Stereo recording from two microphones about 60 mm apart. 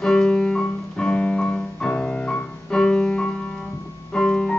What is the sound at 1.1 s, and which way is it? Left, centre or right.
Piano, left.